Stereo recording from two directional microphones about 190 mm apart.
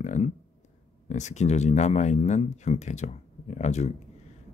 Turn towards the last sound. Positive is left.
turn(degrees=35)  # may be behind; listen again after turning